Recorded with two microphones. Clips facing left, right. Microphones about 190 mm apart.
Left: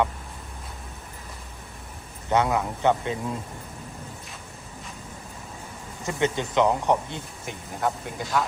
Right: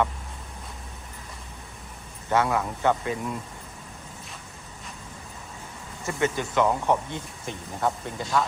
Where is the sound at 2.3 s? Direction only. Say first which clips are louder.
Left 1 dB; 20° left (ahead or behind).